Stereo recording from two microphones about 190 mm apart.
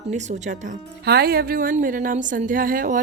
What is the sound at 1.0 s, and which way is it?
Speech, 55° right (ahead or behind).